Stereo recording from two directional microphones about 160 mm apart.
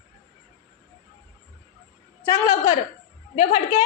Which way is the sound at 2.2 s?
20° left (ahead or behind).